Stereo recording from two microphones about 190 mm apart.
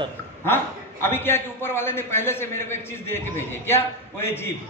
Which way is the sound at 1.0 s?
10° left (ahead or behind).